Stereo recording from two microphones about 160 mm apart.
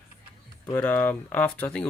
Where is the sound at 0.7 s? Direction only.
10° left (ahead or behind).